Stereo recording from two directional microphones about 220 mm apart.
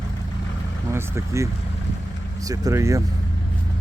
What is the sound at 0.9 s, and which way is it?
Speech, 10° right (ahead or behind).